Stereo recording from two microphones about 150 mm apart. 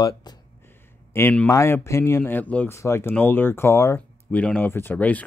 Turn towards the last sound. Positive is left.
turn(degrees=10)  # may be behind; listen again after turning